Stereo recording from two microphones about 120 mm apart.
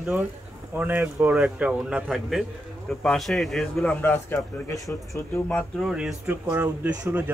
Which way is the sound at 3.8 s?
15° left (ahead or behind).